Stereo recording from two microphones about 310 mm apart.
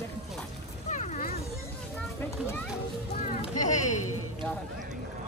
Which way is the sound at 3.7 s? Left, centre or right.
Left.